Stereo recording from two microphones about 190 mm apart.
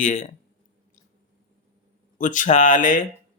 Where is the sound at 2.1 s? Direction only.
40° left (ahead or behind).